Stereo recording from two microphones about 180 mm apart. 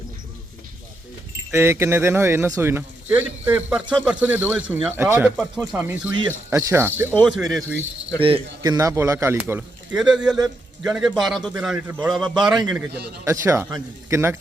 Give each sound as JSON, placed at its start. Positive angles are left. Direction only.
{"t": 1.5, "sound": "speech", "side_deg": -10}
{"t": 5.4, "sound": "a man's voice", "side_deg": 5}
{"t": 5.8, "sound": "speech", "side_deg": -10}
{"t": 7.3, "sound": "a man's voice", "side_deg": 0}
{"t": 8.2, "sound": "a man's voice", "side_deg": -25}
{"t": 13.2, "sound": "speech", "side_deg": -15}